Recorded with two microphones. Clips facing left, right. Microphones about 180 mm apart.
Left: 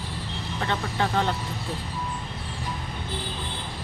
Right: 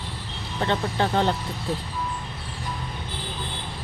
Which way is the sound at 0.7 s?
30° right (ahead or behind).